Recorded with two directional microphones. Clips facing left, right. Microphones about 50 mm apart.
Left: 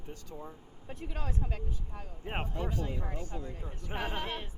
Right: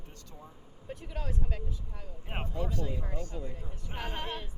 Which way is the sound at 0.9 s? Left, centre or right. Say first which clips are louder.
Even; left.